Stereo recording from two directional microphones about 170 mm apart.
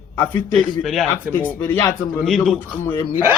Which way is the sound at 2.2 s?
Centre (ahead or behind).